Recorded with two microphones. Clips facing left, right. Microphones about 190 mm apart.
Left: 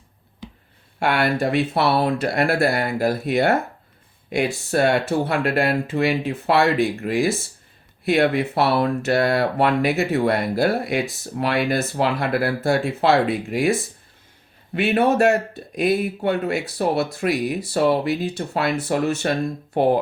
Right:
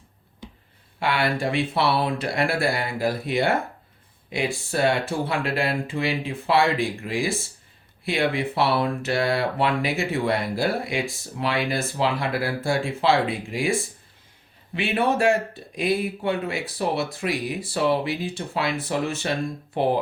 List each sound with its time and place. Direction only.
0.9 s speech: 45° left (ahead or behind)
2.0 s speech: 55° left (ahead or behind)
8.0 s speech: 45° left (ahead or behind)
13.0 s speech: 45° left (ahead or behind)
14.8 s speech: 40° left (ahead or behind)